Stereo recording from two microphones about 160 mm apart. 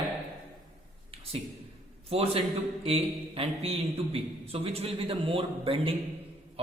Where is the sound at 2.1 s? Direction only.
40° right (ahead or behind).